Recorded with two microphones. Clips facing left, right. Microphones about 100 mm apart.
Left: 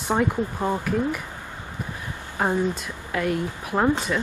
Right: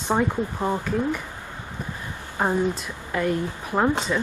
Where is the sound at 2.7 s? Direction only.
Centre (ahead or behind).